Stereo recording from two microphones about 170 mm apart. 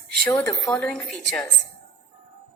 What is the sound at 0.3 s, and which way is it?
Speech, 5° left (ahead or behind).